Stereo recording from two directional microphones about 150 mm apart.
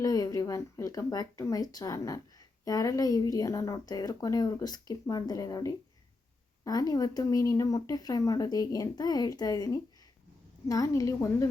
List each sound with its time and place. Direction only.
0.0 s speech: 25° left (ahead or behind)